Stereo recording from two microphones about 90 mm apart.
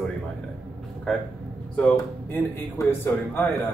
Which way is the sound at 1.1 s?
10° left (ahead or behind).